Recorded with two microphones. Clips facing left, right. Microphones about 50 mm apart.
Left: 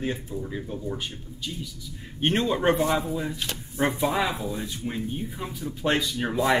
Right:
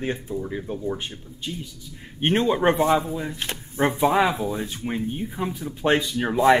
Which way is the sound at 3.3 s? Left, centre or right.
Right.